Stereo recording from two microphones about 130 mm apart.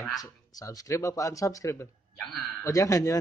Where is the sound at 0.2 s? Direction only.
30° left (ahead or behind).